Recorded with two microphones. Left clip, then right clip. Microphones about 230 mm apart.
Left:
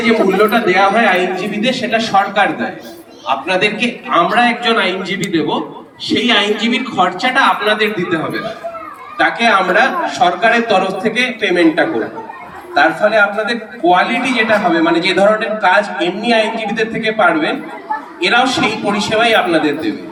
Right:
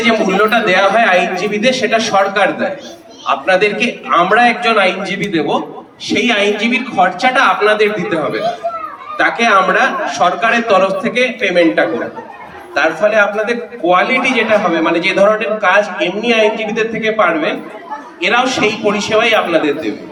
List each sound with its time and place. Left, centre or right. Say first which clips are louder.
0.0 s a man's voice: even; centre
3.4 s a man's voice: right 4 dB; centre
6.3 s a man's voice: left 1 dB; right
6.7 s a man's voice: right 2 dB; centre